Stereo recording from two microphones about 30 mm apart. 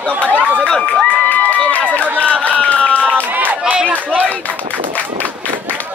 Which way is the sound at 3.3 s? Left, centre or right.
Right.